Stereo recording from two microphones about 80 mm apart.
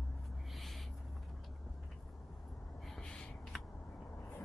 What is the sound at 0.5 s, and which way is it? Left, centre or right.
Owl, centre.